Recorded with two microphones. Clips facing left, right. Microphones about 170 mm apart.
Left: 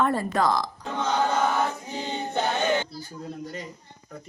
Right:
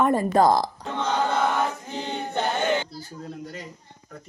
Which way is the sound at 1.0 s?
10° right (ahead or behind).